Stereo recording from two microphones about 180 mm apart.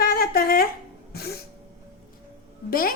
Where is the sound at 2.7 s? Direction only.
55° left (ahead or behind).